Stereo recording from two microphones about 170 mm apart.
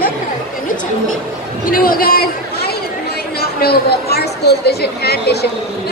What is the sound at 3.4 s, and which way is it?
Speech, 65° left (ahead or behind).